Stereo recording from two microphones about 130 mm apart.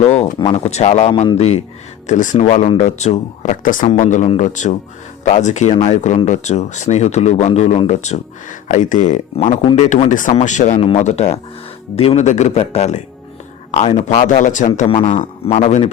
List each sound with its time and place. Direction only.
0.0 s speech: 55° left (ahead or behind)
2.0 s speech: 75° left (ahead or behind)
10.3 s speech: 70° left (ahead or behind)
14.8 s speech: 60° left (ahead or behind)